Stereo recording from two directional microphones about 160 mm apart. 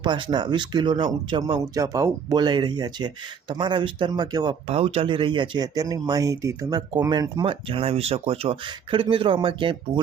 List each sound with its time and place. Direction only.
0.0 s speech: 25° right (ahead or behind)
4.7 s speech: 40° right (ahead or behind)